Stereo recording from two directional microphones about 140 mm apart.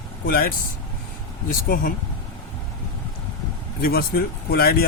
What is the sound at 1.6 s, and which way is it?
Speech, 90° left.